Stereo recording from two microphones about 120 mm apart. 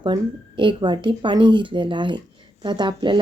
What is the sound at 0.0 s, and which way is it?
Speech, 45° right (ahead or behind).